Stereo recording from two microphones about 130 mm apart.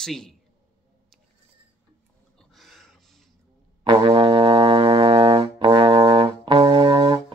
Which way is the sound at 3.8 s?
40° right (ahead or behind).